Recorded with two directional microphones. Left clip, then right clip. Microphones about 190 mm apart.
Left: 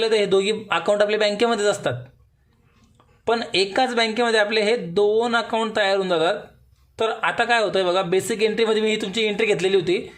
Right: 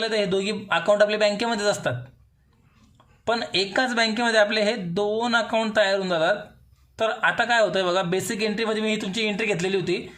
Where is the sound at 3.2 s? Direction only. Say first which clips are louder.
Left 3 dB; 10° left (ahead or behind).